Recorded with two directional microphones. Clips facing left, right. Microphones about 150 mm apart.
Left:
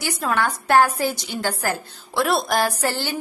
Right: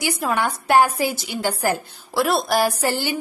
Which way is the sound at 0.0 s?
10° right (ahead or behind).